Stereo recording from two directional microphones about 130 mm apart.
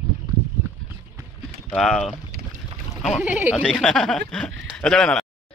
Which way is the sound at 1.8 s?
Centre (ahead or behind).